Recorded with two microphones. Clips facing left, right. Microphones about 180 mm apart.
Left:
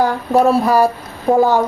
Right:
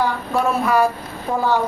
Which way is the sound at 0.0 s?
40° left (ahead or behind).